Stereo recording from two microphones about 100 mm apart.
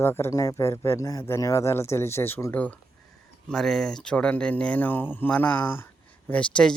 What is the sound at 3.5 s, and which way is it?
Speech, 5° left (ahead or behind).